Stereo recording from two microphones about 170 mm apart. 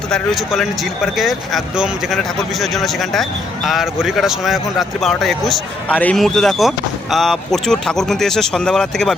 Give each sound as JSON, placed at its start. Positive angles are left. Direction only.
{"t": 0.1, "sound": "speech", "side_deg": 0}